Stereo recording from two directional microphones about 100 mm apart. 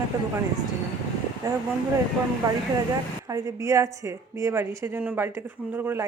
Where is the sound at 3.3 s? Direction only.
35° right (ahead or behind).